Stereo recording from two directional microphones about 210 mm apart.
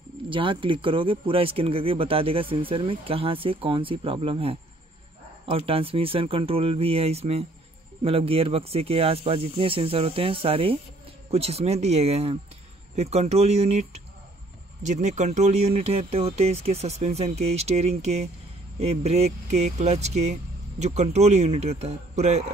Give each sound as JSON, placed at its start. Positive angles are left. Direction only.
{"t": 0.3, "sound": "speech", "side_deg": -25}